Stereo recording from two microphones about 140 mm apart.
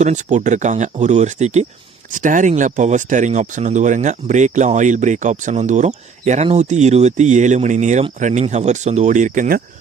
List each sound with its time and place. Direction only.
0.0 s speech: 60° right (ahead or behind)
2.1 s speech: 70° right (ahead or behind)